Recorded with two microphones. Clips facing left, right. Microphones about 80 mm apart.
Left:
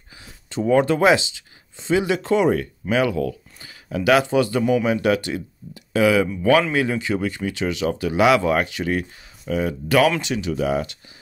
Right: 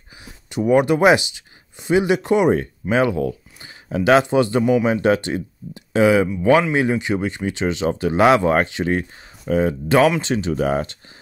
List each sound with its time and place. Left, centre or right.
0.2 s speech: centre; by 11.0 s right